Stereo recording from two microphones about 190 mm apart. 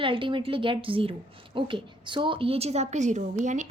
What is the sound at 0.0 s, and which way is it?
A woman's voice, 25° right (ahead or behind).